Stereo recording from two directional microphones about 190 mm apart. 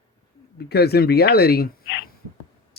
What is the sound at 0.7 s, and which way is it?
Speech, 55° left (ahead or behind).